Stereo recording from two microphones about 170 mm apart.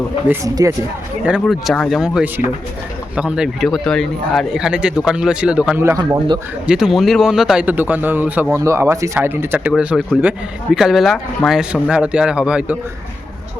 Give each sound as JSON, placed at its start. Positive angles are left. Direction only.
{"t": 0.3, "sound": "a man's voice", "side_deg": -20}
{"t": 1.2, "sound": "speech", "side_deg": -5}
{"t": 6.0, "sound": "a man's voice", "side_deg": -25}
{"t": 6.7, "sound": "speech", "side_deg": -5}